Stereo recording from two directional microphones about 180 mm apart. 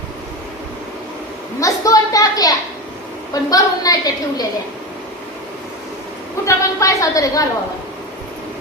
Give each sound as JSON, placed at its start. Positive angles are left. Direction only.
{"t": 1.6, "sound": "a sound", "side_deg": 20}
{"t": 3.5, "sound": "a woman's voice", "side_deg": 20}
{"t": 6.4, "sound": "a woman's voice", "side_deg": 15}